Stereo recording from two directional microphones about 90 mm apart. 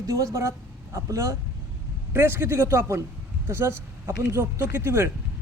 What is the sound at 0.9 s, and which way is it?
A woman's voice, 35° right (ahead or behind).